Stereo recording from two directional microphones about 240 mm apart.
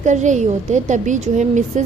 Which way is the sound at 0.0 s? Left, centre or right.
Right.